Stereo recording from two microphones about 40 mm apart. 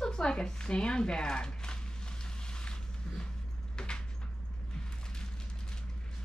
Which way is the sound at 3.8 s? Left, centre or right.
Centre.